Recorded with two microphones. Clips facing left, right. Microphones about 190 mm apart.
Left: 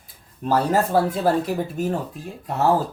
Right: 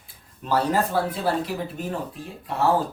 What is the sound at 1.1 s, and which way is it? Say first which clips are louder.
Speech: left 5 dB; 45° left (ahead or behind).